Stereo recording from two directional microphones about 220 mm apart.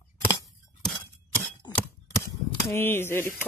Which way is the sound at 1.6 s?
20° left (ahead or behind).